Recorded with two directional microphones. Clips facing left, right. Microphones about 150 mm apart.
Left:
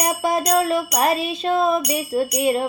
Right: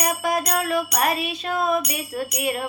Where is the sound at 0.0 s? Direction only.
25° left (ahead or behind).